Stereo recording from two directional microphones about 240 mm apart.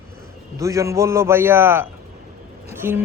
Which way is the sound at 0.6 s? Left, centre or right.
Centre.